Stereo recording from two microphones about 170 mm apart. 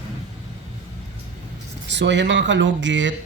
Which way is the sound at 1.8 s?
90° right.